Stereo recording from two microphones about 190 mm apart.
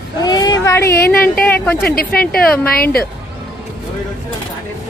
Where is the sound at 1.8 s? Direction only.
50° left (ahead or behind).